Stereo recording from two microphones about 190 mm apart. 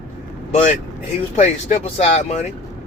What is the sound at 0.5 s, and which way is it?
Speech, 40° left (ahead or behind).